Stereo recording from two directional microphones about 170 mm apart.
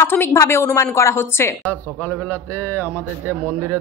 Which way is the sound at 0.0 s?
15° left (ahead or behind).